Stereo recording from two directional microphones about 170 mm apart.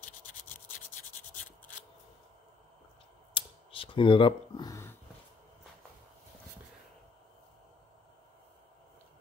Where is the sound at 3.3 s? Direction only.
30° left (ahead or behind).